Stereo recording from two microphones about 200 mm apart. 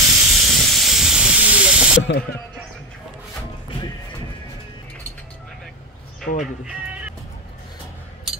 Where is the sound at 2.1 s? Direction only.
60° left (ahead or behind).